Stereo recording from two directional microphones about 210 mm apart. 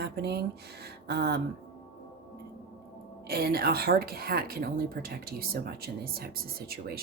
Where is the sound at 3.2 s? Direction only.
45° right (ahead or behind).